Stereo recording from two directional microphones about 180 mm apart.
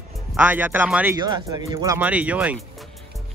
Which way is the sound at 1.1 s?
20° right (ahead or behind).